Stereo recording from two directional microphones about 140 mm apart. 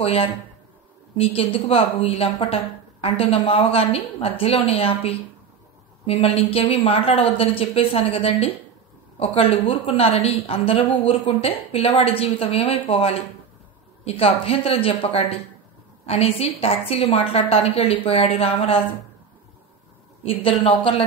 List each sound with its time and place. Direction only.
0.0 s a woman's voice: 45° left (ahead or behind)
20.2 s speech: 40° left (ahead or behind)